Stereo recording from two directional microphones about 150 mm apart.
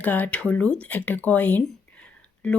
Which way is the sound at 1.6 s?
5° left (ahead or behind).